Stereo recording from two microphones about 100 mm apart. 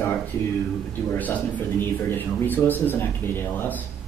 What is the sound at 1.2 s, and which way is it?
Speech, 15° left (ahead or behind).